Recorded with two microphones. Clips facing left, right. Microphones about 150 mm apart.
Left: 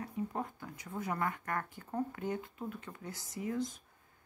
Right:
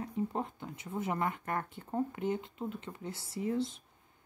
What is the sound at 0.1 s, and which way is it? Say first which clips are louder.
Speech: right 4 dB; 25° right (ahead or behind).